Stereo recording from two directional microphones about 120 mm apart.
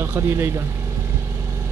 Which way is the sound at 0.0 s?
20° right (ahead or behind).